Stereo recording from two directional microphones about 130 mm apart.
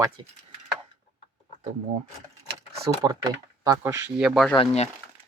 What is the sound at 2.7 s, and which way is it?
Speech, 25° right (ahead or behind).